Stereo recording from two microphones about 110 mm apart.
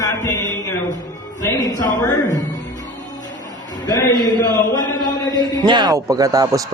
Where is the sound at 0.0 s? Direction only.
30° left (ahead or behind).